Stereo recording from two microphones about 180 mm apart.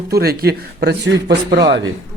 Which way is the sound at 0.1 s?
60° right (ahead or behind).